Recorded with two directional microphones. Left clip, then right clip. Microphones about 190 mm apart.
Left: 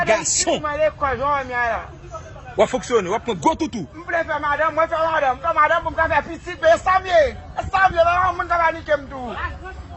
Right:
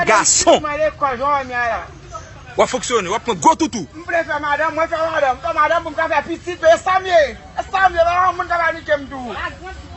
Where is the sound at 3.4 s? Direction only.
10° left (ahead or behind).